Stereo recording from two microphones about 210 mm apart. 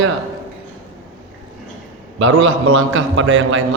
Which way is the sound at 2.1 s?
65° right (ahead or behind).